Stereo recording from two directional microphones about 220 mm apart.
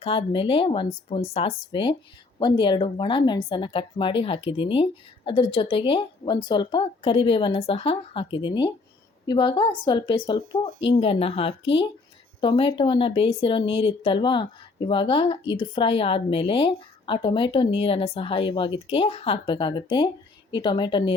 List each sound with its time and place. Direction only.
0.0 s a woman's voice: 25° left (ahead or behind)